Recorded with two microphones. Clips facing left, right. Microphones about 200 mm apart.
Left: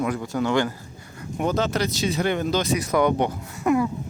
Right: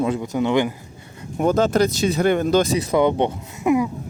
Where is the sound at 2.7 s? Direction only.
25° right (ahead or behind).